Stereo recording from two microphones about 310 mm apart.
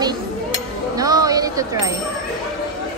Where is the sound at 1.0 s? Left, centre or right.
Centre.